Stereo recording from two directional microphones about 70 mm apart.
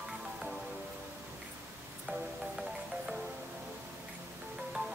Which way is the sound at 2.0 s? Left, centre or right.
Centre.